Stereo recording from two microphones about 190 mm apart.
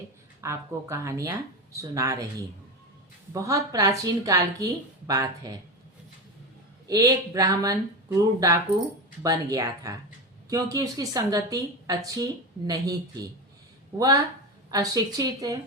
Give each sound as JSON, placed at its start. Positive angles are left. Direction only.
{"t": 0.4, "sound": "a woman's voice", "side_deg": -15}
{"t": 3.3, "sound": "a woman's voice", "side_deg": -15}
{"t": 6.8, "sound": "a woman's voice", "side_deg": -20}
{"t": 14.7, "sound": "a woman's voice", "side_deg": -20}